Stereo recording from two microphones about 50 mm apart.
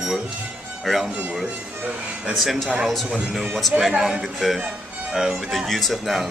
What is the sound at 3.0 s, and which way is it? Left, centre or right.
Speech, centre.